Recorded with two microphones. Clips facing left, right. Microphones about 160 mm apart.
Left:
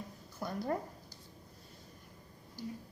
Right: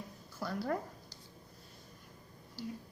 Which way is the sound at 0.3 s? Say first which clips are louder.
Even; 20° left (ahead or behind).